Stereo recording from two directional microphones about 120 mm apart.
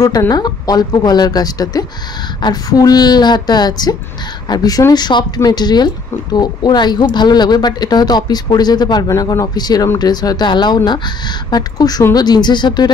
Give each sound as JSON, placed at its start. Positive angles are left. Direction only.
{"t": 0.3, "sound": "speech", "side_deg": 35}